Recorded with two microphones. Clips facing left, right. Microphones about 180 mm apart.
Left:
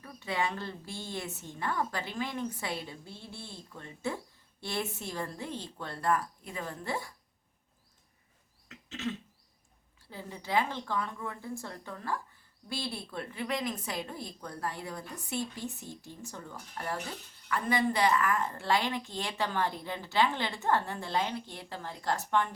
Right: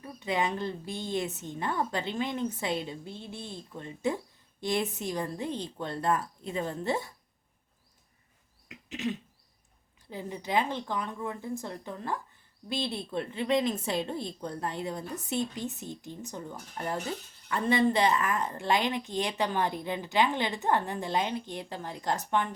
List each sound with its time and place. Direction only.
0.0 s a woman's voice: 20° right (ahead or behind)
8.7 s cough: 15° right (ahead or behind)
10.1 s a woman's voice: 20° right (ahead or behind)